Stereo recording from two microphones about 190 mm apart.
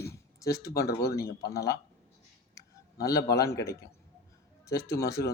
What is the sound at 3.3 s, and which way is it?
Speech, 15° left (ahead or behind).